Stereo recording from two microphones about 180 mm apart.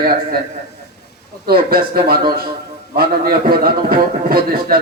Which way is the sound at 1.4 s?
55° right (ahead or behind).